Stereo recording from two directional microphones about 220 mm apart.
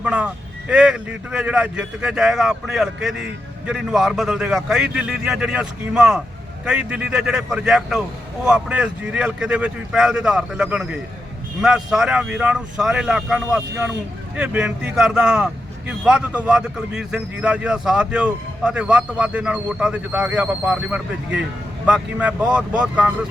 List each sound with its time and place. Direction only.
0.0 s vehicle: 5° right (ahead or behind)
0.7 s speech: 5° right (ahead or behind)